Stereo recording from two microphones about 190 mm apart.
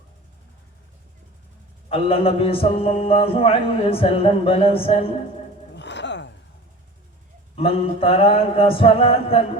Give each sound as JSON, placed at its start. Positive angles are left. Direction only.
{"t": 1.9, "sound": "a man's voice", "side_deg": 30}
{"t": 5.7, "sound": "music", "side_deg": 65}
{"t": 7.5, "sound": "a man's voice", "side_deg": 30}